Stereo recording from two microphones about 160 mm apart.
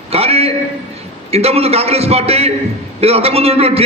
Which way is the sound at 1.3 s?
40° right (ahead or behind).